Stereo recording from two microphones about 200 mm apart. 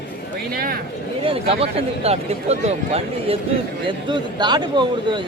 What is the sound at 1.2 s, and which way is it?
Speech, 30° right (ahead or behind).